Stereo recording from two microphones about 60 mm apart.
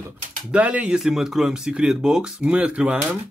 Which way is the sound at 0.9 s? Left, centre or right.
Centre.